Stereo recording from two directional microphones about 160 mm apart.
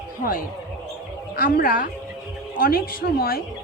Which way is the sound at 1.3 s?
65° left (ahead or behind).